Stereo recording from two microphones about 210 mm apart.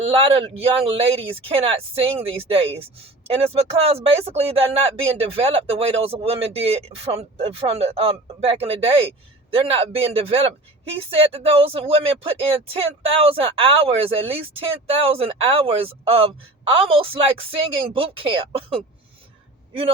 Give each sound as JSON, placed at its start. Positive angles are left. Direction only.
{"t": 0.0, "sound": "a man's voice", "side_deg": -25}